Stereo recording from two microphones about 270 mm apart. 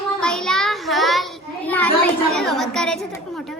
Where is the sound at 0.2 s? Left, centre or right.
Centre.